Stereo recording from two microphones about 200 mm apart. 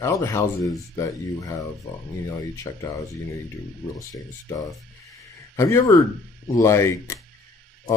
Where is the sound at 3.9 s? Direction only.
15° left (ahead or behind).